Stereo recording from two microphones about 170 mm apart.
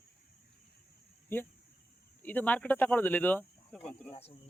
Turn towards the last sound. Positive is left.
turn(degrees=35)  # may be behind; listen again after turning